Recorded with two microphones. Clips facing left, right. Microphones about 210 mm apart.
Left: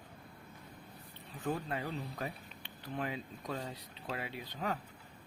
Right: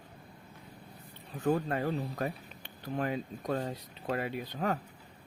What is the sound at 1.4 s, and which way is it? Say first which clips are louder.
Speech: right 7 dB; 50° right (ahead or behind).